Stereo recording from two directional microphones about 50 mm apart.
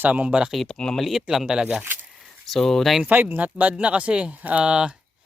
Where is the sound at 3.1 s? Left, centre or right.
Right; by 4.9 s centre.